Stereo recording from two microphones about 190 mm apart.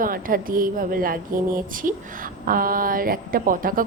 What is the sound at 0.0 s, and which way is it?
Speech, 45° right (ahead or behind).